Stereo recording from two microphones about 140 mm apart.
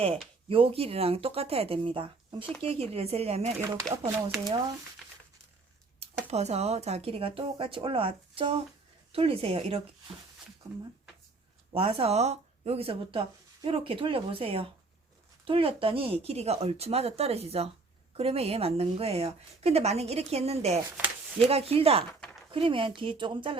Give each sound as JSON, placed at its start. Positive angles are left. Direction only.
{"t": 0.4, "sound": "speech", "side_deg": -40}
{"t": 3.9, "sound": "speech", "side_deg": -20}
{"t": 6.0, "sound": "speech", "side_deg": -50}
{"t": 11.7, "sound": "speech", "side_deg": -40}